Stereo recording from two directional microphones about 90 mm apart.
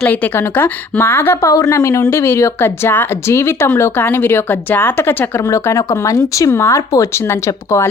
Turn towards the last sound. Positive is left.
turn(degrees=30)  # may be behind; listen again after turning